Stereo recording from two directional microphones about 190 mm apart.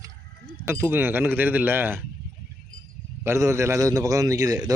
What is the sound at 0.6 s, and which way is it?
A man's voice, 10° right (ahead or behind).